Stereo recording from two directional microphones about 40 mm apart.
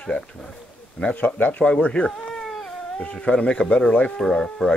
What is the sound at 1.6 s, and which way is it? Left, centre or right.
Speech, left.